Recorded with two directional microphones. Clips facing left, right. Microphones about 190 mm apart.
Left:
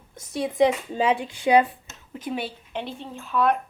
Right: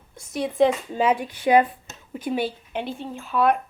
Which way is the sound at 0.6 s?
15° left (ahead or behind).